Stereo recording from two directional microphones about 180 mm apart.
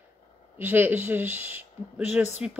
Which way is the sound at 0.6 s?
10° right (ahead or behind).